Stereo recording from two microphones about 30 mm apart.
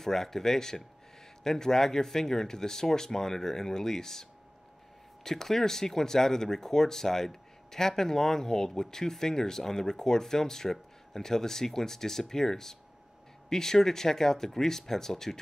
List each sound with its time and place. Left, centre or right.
0.0 s speech: centre